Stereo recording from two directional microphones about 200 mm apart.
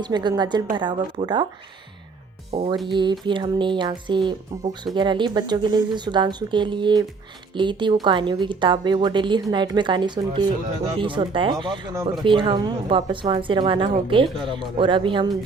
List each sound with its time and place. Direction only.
0.0 s a woman's voice: 20° right (ahead or behind)
2.5 s a woman's voice: 30° right (ahead or behind)